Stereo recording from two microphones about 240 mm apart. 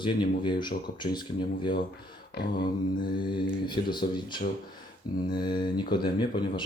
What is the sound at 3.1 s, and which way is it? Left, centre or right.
Speech, centre.